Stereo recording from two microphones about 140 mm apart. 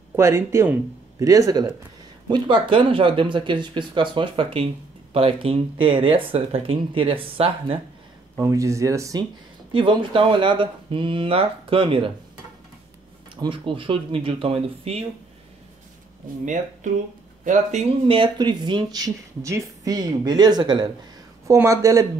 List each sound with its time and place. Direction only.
0.1 s speech: 20° right (ahead or behind); by 7.8 s 40° right (ahead or behind)
8.4 s speech: 20° right (ahead or behind)
9.7 s speech: 35° right (ahead or behind)
13.4 s speech: 40° right (ahead or behind)
17.5 s speech: 60° right (ahead or behind)
18.0 s speech: 40° right (ahead or behind); by 22.0 s 20° right (ahead or behind)